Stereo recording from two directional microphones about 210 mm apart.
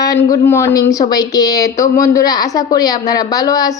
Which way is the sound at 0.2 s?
10° left (ahead or behind).